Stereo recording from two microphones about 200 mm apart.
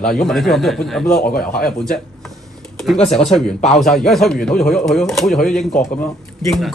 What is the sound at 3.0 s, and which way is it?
Speech, 30° left (ahead or behind).